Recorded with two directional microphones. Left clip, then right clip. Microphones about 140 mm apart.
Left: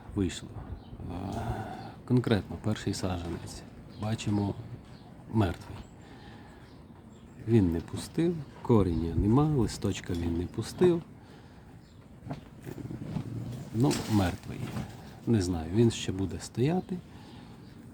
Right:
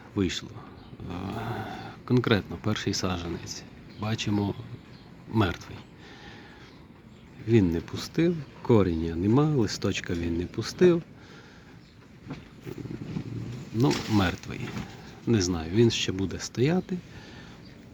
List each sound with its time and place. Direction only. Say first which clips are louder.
0.2 s speech: right 4 dB; 5° left (ahead or behind)
7.4 s speech: right 3 dB; 10° left (ahead or behind)
13.8 s speech: right 3 dB; centre (ahead or behind)